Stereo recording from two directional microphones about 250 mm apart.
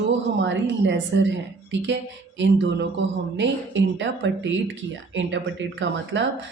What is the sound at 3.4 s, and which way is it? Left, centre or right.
Speech, right.